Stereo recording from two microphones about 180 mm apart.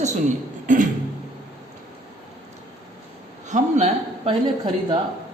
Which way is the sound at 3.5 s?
40° right (ahead or behind).